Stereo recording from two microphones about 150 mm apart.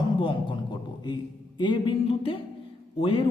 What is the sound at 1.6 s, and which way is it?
Speech, 30° left (ahead or behind).